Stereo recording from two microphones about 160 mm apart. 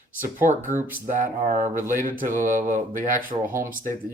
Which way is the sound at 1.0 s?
55° right (ahead or behind).